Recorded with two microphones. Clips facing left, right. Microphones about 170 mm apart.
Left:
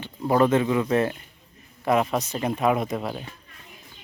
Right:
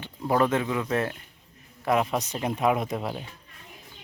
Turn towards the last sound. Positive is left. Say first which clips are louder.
# left 2 dB
turn(degrees=-15)  # may be behind; listen again after turning